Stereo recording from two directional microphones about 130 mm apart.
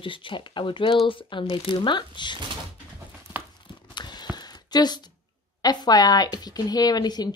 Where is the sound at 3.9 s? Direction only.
35° left (ahead or behind).